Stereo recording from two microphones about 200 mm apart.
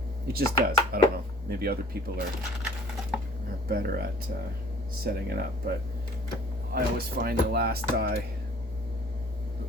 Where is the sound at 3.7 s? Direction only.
50° right (ahead or behind).